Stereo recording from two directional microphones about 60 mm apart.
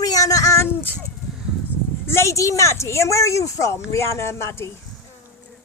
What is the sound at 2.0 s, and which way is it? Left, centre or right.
A woman's voice, left.